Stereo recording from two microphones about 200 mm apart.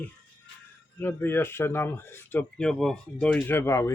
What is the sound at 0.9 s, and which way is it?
Speech, 10° left (ahead or behind).